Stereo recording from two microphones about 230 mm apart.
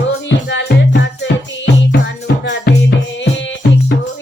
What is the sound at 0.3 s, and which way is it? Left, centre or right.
Music, left.